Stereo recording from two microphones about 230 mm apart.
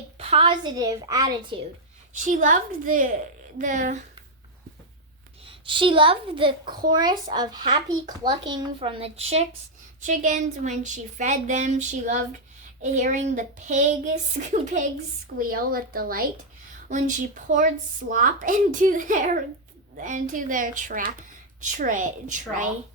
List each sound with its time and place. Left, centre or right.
0.2 s a child's voice: right
2.2 s speech: right
5.5 s a child's voice: right